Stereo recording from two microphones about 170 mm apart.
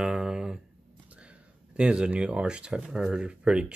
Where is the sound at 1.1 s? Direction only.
5° right (ahead or behind).